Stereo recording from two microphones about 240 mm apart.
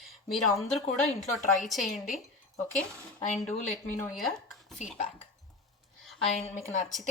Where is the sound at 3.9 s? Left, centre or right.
Centre.